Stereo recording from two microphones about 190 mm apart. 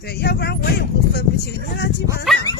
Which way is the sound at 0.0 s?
60° left (ahead or behind).